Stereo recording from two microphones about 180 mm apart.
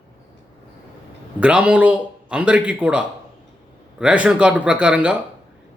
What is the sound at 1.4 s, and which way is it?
A man's voice, 5° right (ahead or behind).